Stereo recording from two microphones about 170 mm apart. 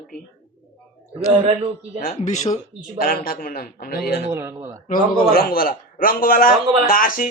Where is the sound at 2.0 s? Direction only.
50° left (ahead or behind).